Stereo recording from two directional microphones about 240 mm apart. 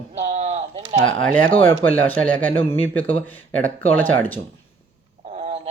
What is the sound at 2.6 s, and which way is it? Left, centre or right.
Speech, left.